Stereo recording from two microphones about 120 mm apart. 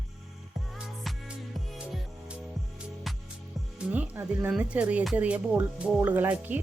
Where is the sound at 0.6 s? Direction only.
5° right (ahead or behind).